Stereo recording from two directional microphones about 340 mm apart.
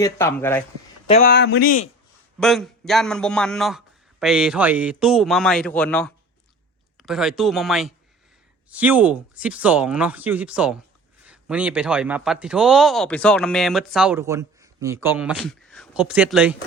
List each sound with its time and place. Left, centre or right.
0.0 s speech: centre
1.0 s speech: left
2.4 s speech: centre